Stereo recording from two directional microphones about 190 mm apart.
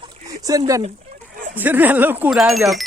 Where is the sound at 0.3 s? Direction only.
20° right (ahead or behind).